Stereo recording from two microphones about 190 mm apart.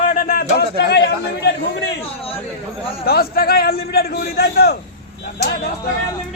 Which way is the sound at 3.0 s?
55° left (ahead or behind).